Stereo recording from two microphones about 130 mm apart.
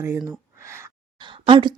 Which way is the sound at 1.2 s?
40° right (ahead or behind).